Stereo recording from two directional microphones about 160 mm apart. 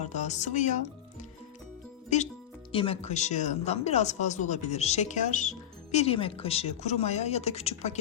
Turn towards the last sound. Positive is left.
turn(degrees=40)  # may be behind; listen again after turning